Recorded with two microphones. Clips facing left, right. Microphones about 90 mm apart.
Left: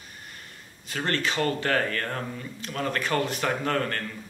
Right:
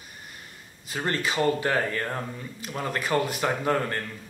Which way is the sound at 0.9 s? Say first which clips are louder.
Even; 10° right (ahead or behind).